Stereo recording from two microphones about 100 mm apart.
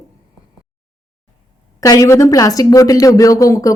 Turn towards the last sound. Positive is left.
turn(degrees=35)  # may be behind; listen again after turning